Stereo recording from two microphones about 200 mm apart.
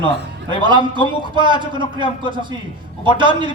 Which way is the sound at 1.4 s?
25° right (ahead or behind).